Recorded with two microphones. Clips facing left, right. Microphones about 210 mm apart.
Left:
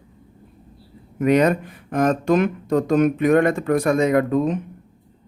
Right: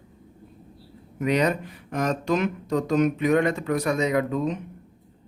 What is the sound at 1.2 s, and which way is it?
Speech, 50° left (ahead or behind).